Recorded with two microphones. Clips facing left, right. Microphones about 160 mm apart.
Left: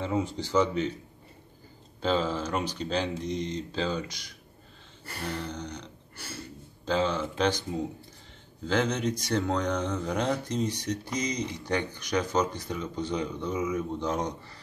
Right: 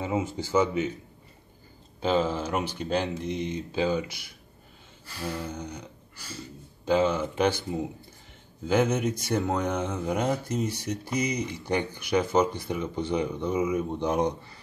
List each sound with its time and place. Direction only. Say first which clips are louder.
0.0 s speech: right 1 dB; 5° right (ahead or behind)
2.0 s speech: right 2 dB; 10° right (ahead or behind)
6.1 s a sound: left 1 dB; 55° left (ahead or behind)
6.9 s speech: right 4 dB; 10° right (ahead or behind)